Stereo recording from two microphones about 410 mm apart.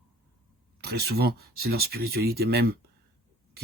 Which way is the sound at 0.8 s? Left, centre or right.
Right.